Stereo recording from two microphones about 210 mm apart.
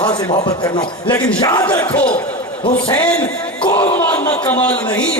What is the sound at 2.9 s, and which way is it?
Speech, 5° left (ahead or behind).